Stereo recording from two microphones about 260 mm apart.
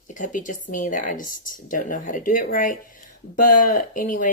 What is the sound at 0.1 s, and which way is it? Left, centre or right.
Speech, left.